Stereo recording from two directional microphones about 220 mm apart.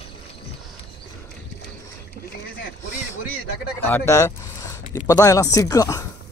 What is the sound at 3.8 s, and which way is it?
Speech, 10° left (ahead or behind).